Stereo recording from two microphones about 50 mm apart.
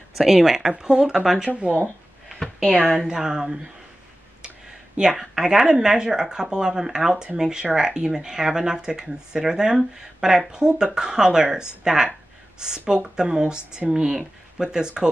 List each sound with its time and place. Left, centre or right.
0.2 s speech: centre
2.7 s speech: centre
3.1 s speech: centre
5.1 s speech: centre